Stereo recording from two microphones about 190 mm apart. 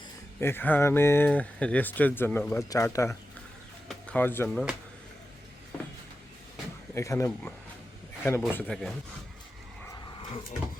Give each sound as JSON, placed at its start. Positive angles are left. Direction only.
{"t": 0.3, "sound": "speech", "side_deg": 10}
{"t": 6.9, "sound": "speech", "side_deg": 15}